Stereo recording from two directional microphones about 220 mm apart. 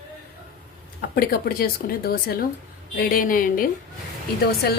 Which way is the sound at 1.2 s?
45° left (ahead or behind).